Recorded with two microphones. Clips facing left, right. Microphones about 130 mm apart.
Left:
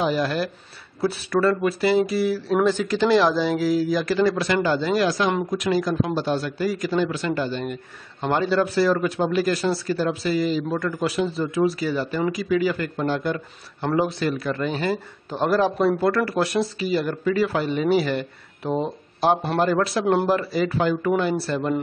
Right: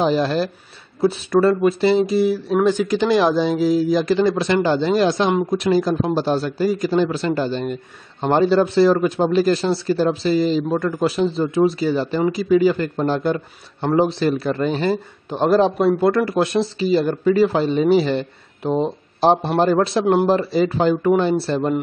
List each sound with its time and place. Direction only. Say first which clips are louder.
0.0 s a man's voice: right 4 dB; 30° right (ahead or behind)